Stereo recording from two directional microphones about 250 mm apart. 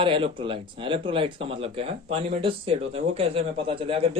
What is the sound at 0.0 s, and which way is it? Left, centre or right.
Speech, centre.